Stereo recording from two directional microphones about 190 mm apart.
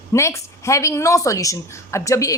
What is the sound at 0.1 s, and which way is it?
A woman's voice, 15° left (ahead or behind).